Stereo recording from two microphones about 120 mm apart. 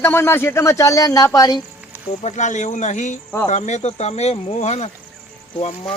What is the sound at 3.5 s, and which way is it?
Speech, 75° left (ahead or behind).